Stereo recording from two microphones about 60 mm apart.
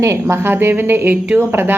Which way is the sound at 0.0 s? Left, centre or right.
Right.